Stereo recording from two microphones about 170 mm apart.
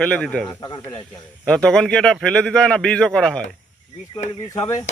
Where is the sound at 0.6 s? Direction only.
25° left (ahead or behind).